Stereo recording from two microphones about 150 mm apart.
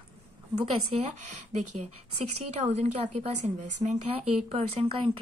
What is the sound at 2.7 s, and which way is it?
A woman's voice, 50° right (ahead or behind).